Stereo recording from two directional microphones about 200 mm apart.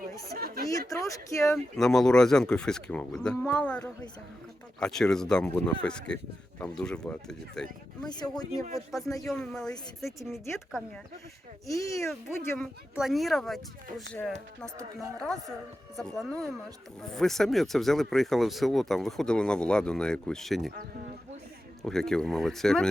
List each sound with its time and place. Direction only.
0.3 s a sound: 50° right (ahead or behind)
0.7 s speech: 15° left (ahead or behind)
1.5 s speech: centre (ahead or behind)
11.6 s speech: 15° left (ahead or behind)
13.0 s speech: centre (ahead or behind)
16.0 s speech: centre (ahead or behind)
21.8 s speech: centre (ahead or behind)